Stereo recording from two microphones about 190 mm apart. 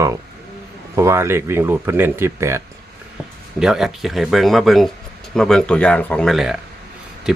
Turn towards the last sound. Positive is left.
turn(degrees=-5)  # may be behind; listen again after turning